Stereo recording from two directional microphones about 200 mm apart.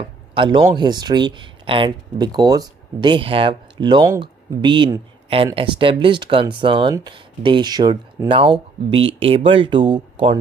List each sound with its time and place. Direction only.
0.3 s speech: 25° right (ahead or behind)